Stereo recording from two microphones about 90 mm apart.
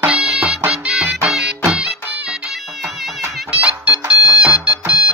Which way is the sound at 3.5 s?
15° right (ahead or behind).